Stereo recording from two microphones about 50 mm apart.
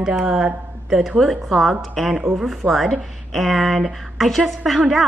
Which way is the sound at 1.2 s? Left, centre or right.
Centre.